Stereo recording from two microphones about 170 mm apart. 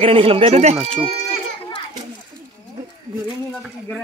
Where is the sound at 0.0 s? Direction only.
35° right (ahead or behind).